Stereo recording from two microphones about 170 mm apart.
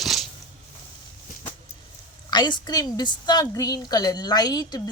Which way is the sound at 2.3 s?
25° left (ahead or behind).